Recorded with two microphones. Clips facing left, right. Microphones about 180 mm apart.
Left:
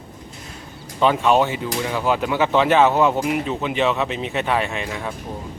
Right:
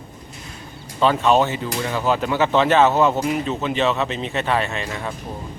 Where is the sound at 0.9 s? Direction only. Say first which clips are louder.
Even; 15° left (ahead or behind).